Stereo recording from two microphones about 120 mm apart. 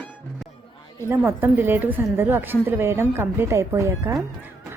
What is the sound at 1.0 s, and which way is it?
A woman's voice, 20° right (ahead or behind).